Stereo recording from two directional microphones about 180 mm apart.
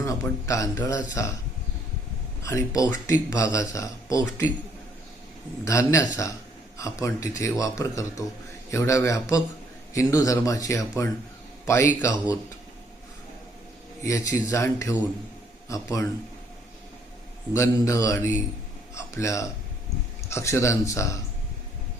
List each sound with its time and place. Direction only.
0.0 s speech: 15° left (ahead or behind)
2.4 s speech: 20° left (ahead or behind)
5.6 s speech: 15° left (ahead or behind)
14.0 s a man's voice: 15° left (ahead or behind)
17.5 s speech: 15° left (ahead or behind)